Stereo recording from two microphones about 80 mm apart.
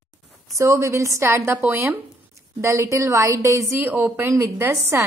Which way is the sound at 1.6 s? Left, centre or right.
Right.